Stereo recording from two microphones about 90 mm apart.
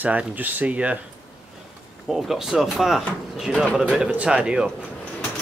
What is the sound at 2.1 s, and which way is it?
Speech, 5° right (ahead or behind).